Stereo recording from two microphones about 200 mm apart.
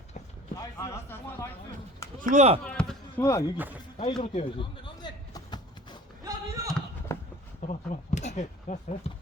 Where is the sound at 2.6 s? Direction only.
5° left (ahead or behind).